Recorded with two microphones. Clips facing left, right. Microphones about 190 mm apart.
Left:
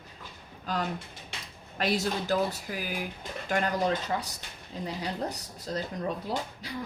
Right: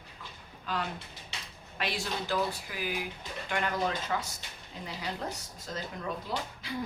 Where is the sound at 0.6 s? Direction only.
40° left (ahead or behind).